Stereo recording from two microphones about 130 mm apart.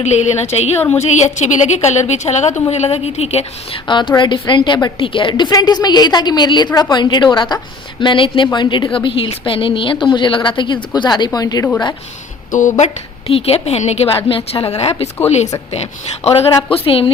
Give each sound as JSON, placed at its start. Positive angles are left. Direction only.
{"t": 0.0, "sound": "a woman's voice", "side_deg": 60}
{"t": 0.8, "sound": "a woman's voice", "side_deg": 15}
{"t": 1.0, "sound": "a woman's voice", "side_deg": 65}
{"t": 3.8, "sound": "a woman's voice", "side_deg": 35}
{"t": 12.5, "sound": "speech", "side_deg": 80}
{"t": 13.2, "sound": "a woman's voice", "side_deg": 50}
{"t": 14.3, "sound": "a woman's voice", "side_deg": 45}